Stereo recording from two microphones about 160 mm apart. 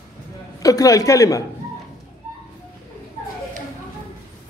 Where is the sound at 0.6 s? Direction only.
20° left (ahead or behind).